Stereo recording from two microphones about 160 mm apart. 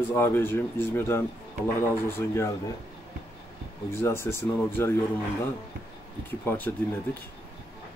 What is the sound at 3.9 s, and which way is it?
Speech, 15° left (ahead or behind).